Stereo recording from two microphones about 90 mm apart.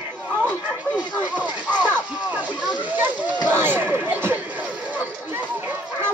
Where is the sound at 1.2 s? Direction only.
20° right (ahead or behind).